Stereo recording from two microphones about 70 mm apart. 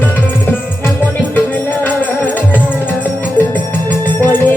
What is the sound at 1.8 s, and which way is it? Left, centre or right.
Music, left.